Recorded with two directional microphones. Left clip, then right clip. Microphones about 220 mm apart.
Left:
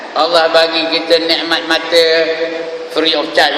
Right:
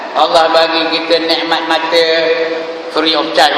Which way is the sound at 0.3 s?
25° left (ahead or behind).